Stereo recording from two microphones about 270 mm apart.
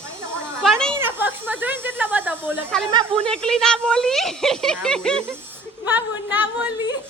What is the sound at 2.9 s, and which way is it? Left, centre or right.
Speech, centre.